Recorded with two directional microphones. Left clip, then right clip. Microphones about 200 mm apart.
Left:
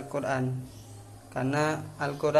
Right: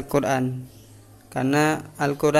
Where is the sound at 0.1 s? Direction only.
45° right (ahead or behind).